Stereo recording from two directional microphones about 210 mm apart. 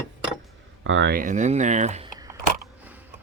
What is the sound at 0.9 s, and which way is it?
Speech, 55° right (ahead or behind).